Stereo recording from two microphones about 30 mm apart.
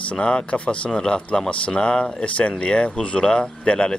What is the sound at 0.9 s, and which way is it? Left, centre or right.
Speech, left.